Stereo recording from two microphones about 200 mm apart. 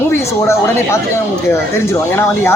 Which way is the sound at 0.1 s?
15° left (ahead or behind).